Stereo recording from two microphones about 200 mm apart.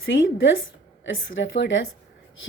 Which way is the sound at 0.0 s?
70° left (ahead or behind).